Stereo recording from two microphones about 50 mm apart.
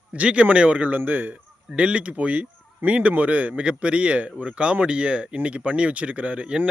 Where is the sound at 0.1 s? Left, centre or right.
Right.